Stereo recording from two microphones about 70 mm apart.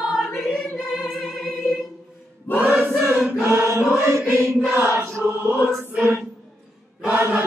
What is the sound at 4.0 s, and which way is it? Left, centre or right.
Mantra, right.